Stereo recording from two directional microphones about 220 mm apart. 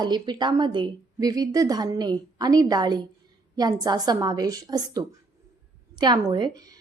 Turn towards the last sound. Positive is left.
turn(degrees=-15)  # may be behind; listen again after turning